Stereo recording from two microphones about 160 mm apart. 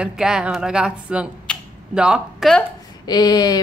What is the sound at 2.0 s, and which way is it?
Speech, 5° right (ahead or behind).